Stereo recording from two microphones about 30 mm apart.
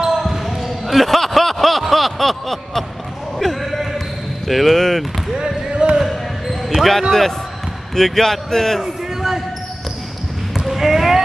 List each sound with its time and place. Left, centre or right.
0.2 s basketball bounce: centre
3.3 s a sound: centre
4.5 s speech: centre
5.7 s basketball bounce: right
5.9 s basketball bounce: centre
6.8 s a man's voice: centre
8.8 s a sound: centre
10.7 s basketball bounce: centre